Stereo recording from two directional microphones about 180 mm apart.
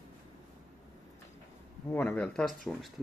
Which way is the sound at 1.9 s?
10° left (ahead or behind).